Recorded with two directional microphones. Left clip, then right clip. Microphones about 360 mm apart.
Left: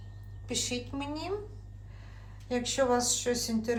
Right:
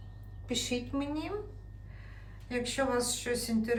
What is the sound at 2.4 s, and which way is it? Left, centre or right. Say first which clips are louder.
Speech: left 4 dB; centre.